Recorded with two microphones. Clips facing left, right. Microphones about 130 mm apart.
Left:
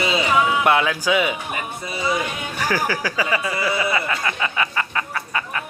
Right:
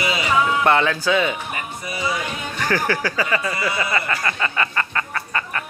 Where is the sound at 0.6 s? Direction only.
10° left (ahead or behind).